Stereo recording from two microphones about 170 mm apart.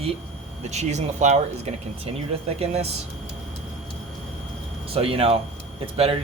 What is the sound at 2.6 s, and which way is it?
Speech, 40° right (ahead or behind).